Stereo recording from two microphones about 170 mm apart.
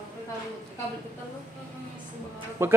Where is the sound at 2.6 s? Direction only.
15° right (ahead or behind).